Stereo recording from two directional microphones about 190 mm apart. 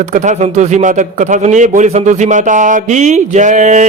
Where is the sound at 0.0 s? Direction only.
40° right (ahead or behind).